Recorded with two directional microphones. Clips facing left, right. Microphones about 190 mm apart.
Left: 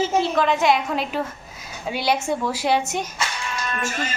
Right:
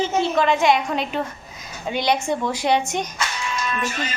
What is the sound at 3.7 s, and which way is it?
Speech, 45° left (ahead or behind).